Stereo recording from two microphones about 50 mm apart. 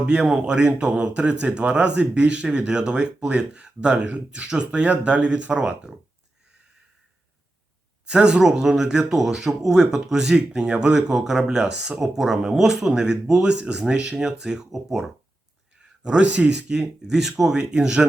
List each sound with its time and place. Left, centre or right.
0.0 s speech: centre
8.0 s speech: centre
16.0 s speech: right